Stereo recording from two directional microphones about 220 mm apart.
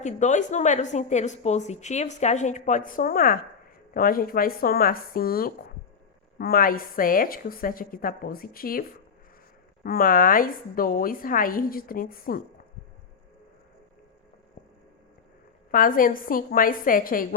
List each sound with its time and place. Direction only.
0.0 s a woman's voice: 35° left (ahead or behind)
9.8 s a woman's voice: 40° left (ahead or behind)
15.7 s a woman's voice: 40° left (ahead or behind)